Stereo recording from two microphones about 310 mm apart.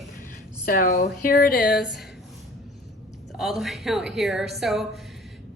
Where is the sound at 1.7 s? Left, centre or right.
Centre.